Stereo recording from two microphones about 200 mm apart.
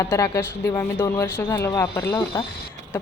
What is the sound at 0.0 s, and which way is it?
Speech, 15° left (ahead or behind).